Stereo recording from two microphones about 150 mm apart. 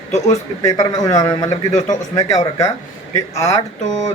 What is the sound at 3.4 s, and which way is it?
Speech, 50° left (ahead or behind).